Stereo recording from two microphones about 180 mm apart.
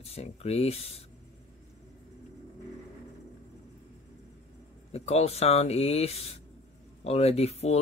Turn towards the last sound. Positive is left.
turn(degrees=35)  # may be behind; listen again after turning